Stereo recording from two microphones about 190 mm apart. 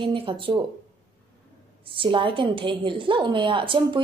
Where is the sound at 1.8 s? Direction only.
25° right (ahead or behind).